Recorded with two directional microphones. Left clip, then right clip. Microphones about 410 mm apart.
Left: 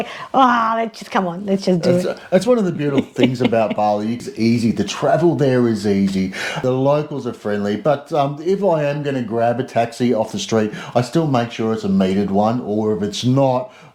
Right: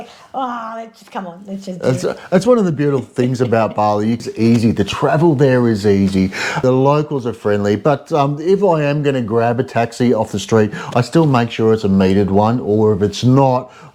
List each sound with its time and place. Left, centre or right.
0.3 s a woman's voice: left
2.0 s speech: right